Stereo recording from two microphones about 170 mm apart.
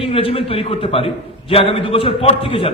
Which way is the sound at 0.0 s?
35° left (ahead or behind).